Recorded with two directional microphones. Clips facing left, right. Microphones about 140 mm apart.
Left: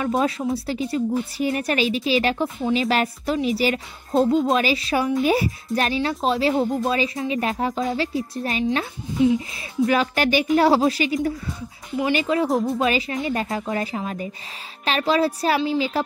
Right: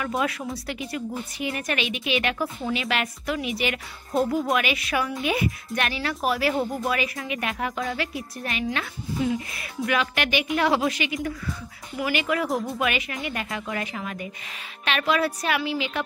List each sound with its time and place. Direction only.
0.1 s a woman's voice: 30° left (ahead or behind)
11.1 s a woman's voice: 25° left (ahead or behind)